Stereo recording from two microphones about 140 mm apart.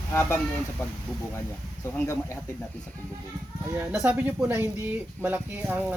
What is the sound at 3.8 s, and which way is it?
Speech, 10° right (ahead or behind).